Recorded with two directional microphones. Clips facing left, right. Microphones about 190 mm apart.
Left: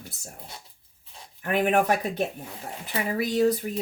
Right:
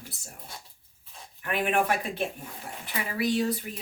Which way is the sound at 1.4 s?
40° left (ahead or behind).